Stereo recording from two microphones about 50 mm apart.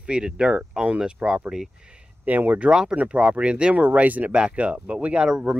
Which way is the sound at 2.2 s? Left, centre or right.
Right.